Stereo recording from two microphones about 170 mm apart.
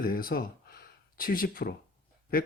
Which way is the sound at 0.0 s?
60° left (ahead or behind).